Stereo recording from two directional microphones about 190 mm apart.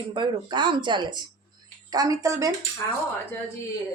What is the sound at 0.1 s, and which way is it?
A woman's voice, 25° right (ahead or behind).